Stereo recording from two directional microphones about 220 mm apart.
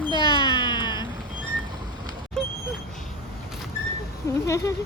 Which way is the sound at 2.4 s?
5° left (ahead or behind).